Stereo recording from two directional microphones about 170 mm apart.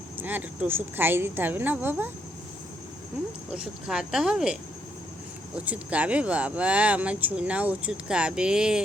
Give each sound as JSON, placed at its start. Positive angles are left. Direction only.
{"t": 0.2, "sound": "speech", "side_deg": -10}
{"t": 3.5, "sound": "speech", "side_deg": -5}
{"t": 5.5, "sound": "speech", "side_deg": -10}